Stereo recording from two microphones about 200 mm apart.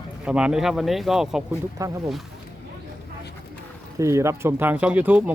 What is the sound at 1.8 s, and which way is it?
Speech, 15° right (ahead or behind).